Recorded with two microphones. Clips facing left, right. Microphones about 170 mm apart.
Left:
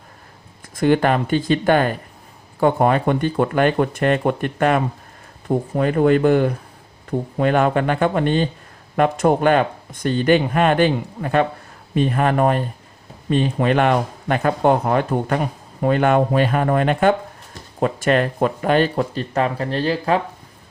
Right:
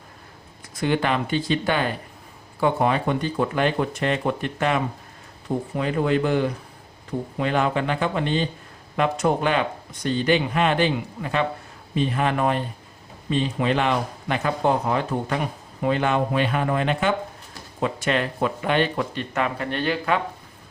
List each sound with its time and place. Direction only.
0.8 s speech: 50° left (ahead or behind)